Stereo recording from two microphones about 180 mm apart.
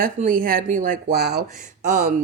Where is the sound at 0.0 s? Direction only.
50° right (ahead or behind).